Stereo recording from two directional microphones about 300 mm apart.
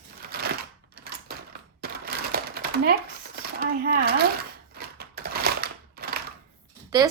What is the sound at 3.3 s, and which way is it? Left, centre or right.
Speech, right.